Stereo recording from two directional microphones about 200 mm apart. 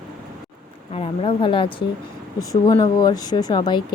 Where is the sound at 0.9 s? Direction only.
30° left (ahead or behind).